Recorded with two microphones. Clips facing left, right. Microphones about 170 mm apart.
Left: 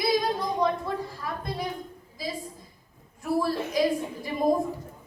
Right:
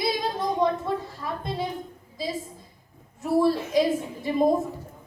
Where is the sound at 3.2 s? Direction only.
25° right (ahead or behind).